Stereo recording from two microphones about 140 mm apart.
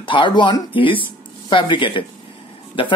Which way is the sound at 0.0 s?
35° left (ahead or behind).